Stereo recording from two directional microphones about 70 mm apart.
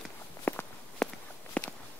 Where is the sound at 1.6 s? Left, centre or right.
Centre.